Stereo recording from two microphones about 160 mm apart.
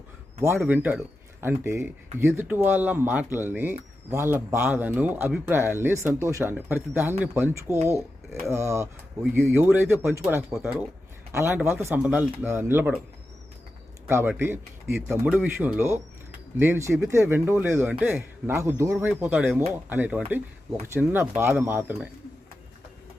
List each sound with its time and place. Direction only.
0.5 s speech: centre (ahead or behind)
14.1 s speech: 15° right (ahead or behind)